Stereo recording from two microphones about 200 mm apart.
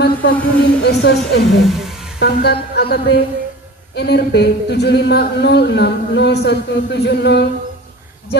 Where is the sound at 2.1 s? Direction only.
55° left (ahead or behind).